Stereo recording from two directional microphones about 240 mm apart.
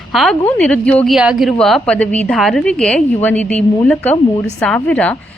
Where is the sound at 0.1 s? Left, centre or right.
Centre.